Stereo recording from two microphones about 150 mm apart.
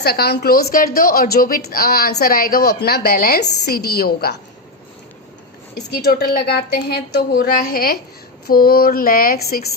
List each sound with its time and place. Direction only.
0.0 s a woman's voice: 90° left
5.7 s a woman's voice: 90° left
8.4 s a sound: 90° left